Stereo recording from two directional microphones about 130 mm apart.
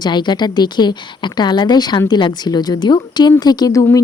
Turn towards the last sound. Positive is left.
turn(degrees=25)  # may be behind; listen again after turning